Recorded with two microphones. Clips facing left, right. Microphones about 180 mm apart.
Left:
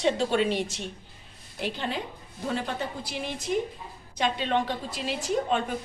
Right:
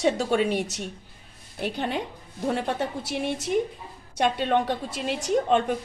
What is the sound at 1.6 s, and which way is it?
A woman's voice, 55° right (ahead or behind).